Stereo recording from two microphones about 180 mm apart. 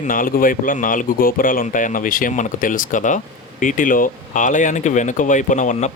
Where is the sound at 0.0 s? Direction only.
50° left (ahead or behind).